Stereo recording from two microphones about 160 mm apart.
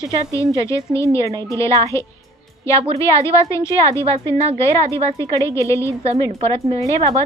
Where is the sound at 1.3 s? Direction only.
20° right (ahead or behind).